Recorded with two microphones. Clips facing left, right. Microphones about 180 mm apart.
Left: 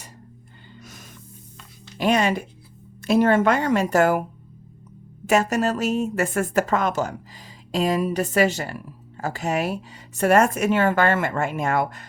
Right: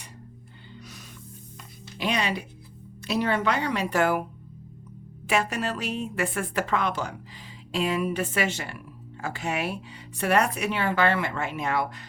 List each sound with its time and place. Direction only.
0.8 s music: 45° left (ahead or behind)
2.0 s speech: 45° left (ahead or behind)
5.2 s speech: 45° left (ahead or behind)